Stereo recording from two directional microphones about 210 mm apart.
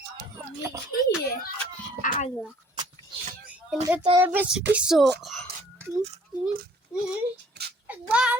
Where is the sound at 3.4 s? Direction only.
5° right (ahead or behind).